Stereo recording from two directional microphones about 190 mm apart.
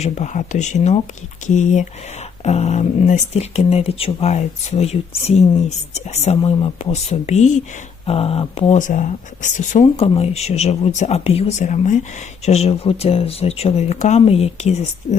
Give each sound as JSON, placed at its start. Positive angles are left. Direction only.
{"t": 0.0, "sound": "speech", "side_deg": 40}